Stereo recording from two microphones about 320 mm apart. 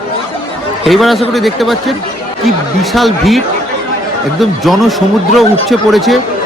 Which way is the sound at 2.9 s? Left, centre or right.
Centre.